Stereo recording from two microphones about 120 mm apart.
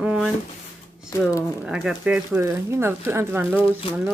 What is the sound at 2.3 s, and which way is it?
Speech, 20° right (ahead or behind).